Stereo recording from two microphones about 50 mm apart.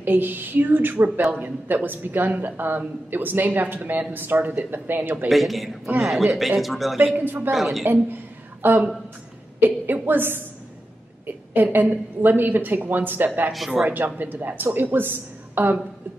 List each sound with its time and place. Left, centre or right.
0.0 s a woman's voice: right
5.3 s a man's voice: centre
7.2 s a woman's voice: right
7.5 s a man's voice: centre
7.8 s a woman's voice: right
10.0 s a woman's voice: right
13.5 s a man's voice: centre
13.8 s a woman's voice: right